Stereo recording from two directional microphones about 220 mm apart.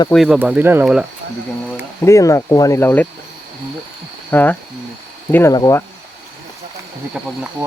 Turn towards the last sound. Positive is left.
turn(degrees=0)  # may be behind; listen again after turning